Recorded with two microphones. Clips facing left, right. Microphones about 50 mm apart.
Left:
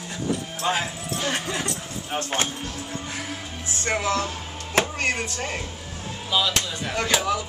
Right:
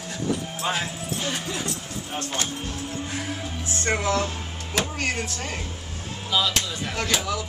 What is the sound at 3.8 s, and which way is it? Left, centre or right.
Speech, left.